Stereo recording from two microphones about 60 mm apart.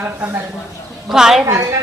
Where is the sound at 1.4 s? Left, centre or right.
Right.